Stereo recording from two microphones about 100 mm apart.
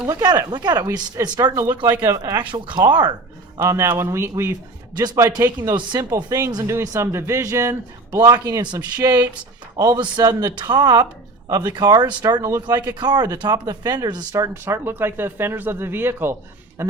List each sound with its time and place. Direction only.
0.0 s speech: 45° right (ahead or behind)
2.5 s speech: 50° right (ahead or behind)
3.7 s speech: 30° right (ahead or behind)
5.7 s speech: 50° right (ahead or behind)
14.5 s speech: 25° right (ahead or behind)